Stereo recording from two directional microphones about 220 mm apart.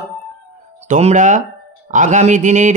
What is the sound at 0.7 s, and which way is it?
Speech, 30° right (ahead or behind).